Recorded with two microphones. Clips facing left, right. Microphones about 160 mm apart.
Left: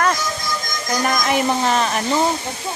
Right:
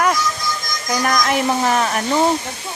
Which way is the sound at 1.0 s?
5° left (ahead or behind).